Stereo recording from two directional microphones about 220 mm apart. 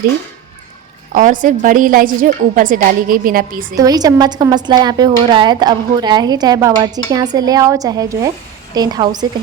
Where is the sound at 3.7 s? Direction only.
15° right (ahead or behind).